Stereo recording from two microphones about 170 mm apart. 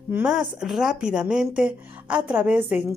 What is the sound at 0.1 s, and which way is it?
A woman's voice, 5° right (ahead or behind).